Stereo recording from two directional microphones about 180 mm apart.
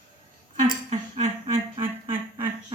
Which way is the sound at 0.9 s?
40° right (ahead or behind).